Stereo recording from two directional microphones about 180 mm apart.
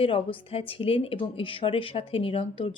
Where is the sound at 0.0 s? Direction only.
30° left (ahead or behind).